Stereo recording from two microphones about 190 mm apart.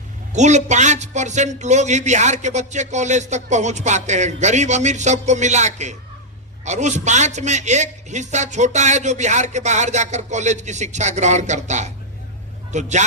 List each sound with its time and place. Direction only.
0.3 s speech: 40° right (ahead or behind)